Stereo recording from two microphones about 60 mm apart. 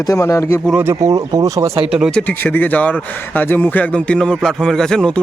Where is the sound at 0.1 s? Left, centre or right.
Left.